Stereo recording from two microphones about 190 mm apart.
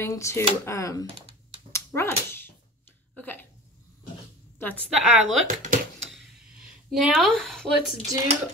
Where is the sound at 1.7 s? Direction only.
15° left (ahead or behind).